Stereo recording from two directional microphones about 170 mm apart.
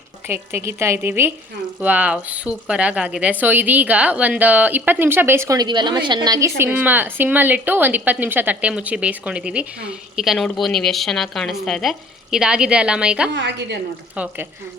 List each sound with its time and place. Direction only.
0.3 s a woman's voice: 15° right (ahead or behind)
13.3 s a woman's voice: 90° right
14.2 s a woman's voice: 10° right (ahead or behind)